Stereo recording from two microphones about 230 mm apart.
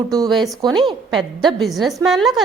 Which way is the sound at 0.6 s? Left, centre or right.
Centre.